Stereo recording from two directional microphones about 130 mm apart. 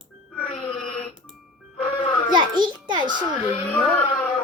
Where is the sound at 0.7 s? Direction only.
5° left (ahead or behind).